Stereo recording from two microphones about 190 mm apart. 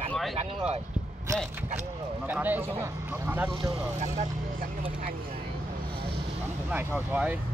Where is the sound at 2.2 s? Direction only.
10° right (ahead or behind).